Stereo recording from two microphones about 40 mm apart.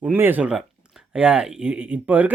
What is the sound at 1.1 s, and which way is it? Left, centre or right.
Speech, right.